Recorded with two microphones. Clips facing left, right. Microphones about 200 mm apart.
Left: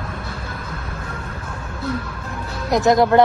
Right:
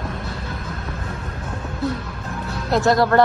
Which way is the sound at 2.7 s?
20° left (ahead or behind).